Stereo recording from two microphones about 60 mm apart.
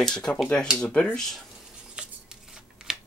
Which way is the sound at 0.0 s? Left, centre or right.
Centre.